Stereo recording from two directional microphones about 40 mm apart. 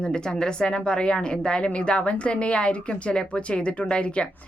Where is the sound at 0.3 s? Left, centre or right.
Centre.